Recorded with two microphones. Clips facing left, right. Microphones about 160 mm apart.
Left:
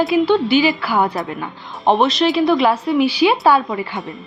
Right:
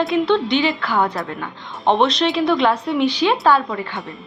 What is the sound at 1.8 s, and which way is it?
A woman's voice, 5° left (ahead or behind).